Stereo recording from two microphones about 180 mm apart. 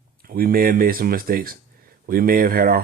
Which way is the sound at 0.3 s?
55° right (ahead or behind).